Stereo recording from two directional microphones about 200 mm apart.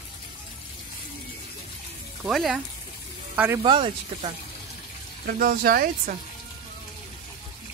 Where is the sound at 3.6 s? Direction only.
25° right (ahead or behind).